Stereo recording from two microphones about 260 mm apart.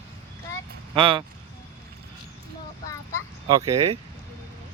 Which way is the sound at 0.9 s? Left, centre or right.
Centre.